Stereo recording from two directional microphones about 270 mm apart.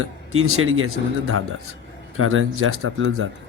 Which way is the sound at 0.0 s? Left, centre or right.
Right.